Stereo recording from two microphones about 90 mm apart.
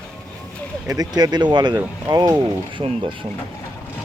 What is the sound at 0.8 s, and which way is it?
Speech, 45° right (ahead or behind).